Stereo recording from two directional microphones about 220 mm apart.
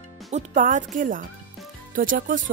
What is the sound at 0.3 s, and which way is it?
Speech, 35° right (ahead or behind).